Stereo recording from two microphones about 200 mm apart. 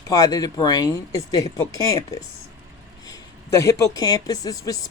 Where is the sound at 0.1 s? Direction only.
20° left (ahead or behind).